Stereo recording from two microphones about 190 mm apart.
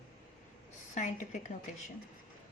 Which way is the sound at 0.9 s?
40° left (ahead or behind).